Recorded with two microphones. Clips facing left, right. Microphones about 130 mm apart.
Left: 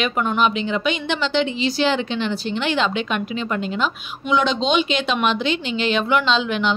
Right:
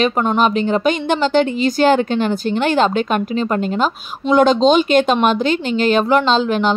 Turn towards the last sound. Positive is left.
turn(degrees=-40)  # may be behind; listen again after turning